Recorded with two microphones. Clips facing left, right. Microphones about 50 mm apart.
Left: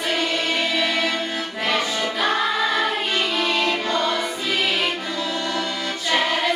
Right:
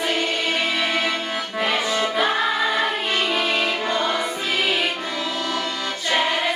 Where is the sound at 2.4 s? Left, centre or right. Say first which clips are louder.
Even; centre.